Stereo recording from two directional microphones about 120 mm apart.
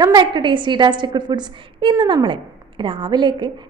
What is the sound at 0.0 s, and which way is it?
A woman's voice, 40° right (ahead or behind).